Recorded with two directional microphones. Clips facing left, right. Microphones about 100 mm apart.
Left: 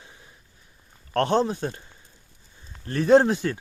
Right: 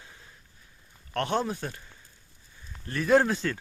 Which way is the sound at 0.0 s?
15° left (ahead or behind).